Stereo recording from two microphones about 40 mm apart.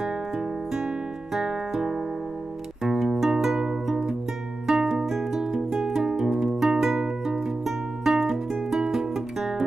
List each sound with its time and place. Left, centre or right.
0.7 s music: centre